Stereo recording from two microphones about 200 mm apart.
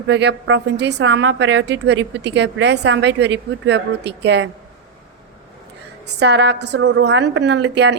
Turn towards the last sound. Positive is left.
turn(degrees=-60)  # may be behind; listen again after turning